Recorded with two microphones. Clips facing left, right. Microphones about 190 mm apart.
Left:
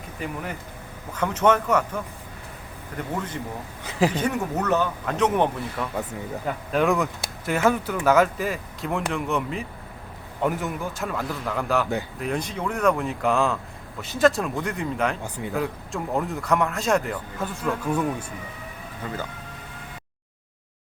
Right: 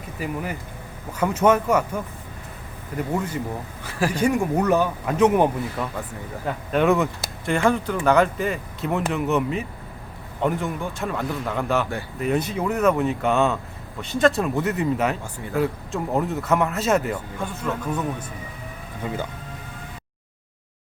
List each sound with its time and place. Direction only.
0.2 s speech: 5° right (ahead or behind)
3.1 s speech: 10° right (ahead or behind)
3.8 s speech: 20° left (ahead or behind)
4.1 s speech: 10° right (ahead or behind); by 18.3 s 10° left (ahead or behind)